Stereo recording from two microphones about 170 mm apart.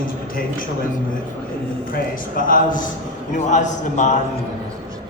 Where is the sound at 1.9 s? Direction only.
55° left (ahead or behind).